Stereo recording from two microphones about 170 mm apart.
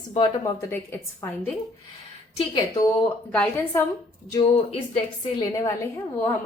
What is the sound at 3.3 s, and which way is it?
Speech, 5° left (ahead or behind).